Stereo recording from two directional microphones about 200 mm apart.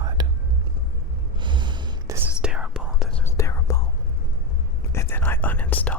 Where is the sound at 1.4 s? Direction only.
25° right (ahead or behind).